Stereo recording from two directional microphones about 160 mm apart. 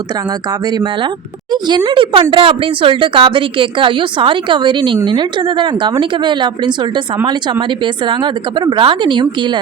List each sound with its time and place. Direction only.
1.6 s a woman's voice: 30° right (ahead or behind)
8.0 s speech: 30° right (ahead or behind)